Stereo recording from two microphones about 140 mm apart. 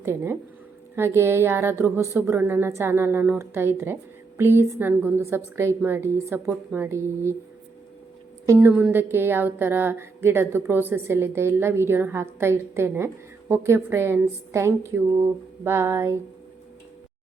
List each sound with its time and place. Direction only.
0.0 s a woman's voice: 15° right (ahead or behind)
8.4 s a woman's voice: 15° right (ahead or behind)